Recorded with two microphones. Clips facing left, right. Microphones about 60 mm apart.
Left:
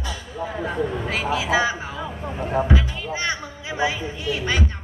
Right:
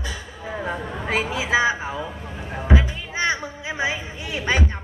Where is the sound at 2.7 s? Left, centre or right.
Right.